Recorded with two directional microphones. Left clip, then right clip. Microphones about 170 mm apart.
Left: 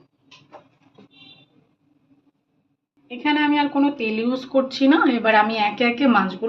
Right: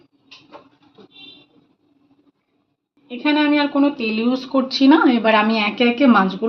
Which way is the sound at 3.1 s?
20° right (ahead or behind).